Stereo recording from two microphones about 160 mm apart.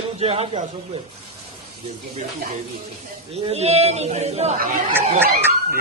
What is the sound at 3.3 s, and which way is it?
Speech, 40° right (ahead or behind).